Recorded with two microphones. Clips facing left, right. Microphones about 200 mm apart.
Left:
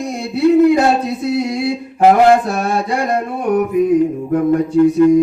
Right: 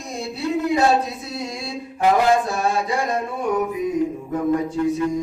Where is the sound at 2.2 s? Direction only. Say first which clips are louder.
Left 6 dB; 65° left (ahead or behind).